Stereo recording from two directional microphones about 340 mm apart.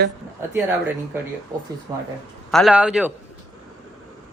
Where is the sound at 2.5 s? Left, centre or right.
Centre.